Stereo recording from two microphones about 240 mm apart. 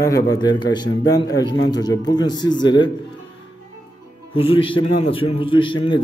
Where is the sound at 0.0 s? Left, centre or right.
Centre.